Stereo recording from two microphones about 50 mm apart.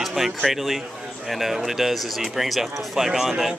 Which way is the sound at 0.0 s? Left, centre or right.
Centre.